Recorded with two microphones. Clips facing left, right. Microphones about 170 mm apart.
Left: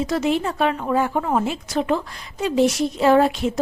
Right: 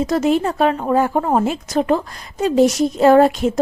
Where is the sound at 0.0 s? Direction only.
40° right (ahead or behind).